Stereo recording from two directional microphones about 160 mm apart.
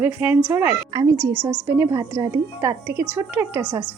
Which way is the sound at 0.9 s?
20° right (ahead or behind).